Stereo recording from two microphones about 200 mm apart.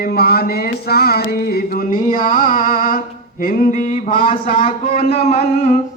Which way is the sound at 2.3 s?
45° left (ahead or behind).